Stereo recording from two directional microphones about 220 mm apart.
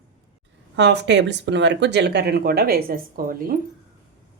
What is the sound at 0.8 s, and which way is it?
Speech, 50° right (ahead or behind).